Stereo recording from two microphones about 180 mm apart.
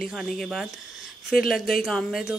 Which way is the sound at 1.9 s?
Centre (ahead or behind).